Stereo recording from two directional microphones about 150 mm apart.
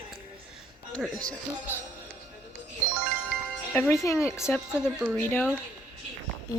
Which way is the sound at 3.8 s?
20° left (ahead or behind).